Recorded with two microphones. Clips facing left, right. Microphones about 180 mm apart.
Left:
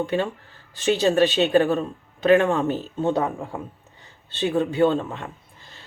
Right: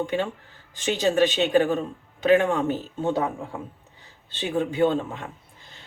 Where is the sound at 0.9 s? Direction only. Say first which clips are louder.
Left 1 dB; 15° right (ahead or behind).